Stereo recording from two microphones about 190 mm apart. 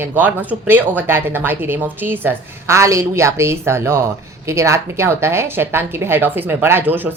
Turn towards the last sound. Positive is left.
turn(degrees=-10)  # may be behind; listen again after turning